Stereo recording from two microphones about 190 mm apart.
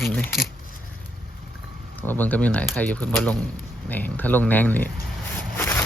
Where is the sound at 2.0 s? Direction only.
10° left (ahead or behind).